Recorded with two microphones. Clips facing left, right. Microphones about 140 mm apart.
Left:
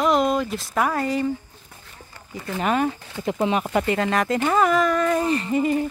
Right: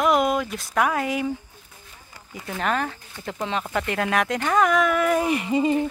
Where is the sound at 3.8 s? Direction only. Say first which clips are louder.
Left 2 dB; centre (ahead or behind); by 5.8 s 20° right (ahead or behind).